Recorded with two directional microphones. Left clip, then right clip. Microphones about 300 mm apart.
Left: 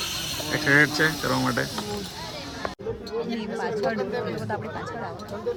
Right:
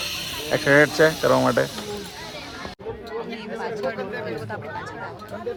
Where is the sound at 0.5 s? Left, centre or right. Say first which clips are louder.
Right 3 dB; centre.